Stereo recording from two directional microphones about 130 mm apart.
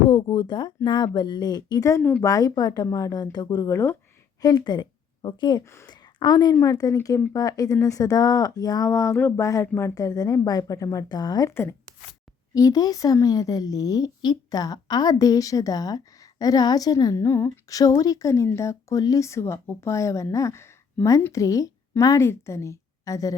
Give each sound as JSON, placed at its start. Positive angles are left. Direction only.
{"t": 0.1, "sound": "speech", "side_deg": 40}
{"t": 2.0, "sound": "speech", "side_deg": 10}
{"t": 2.2, "sound": "a woman's voice", "side_deg": 25}
{"t": 12.5, "sound": "speech", "side_deg": 30}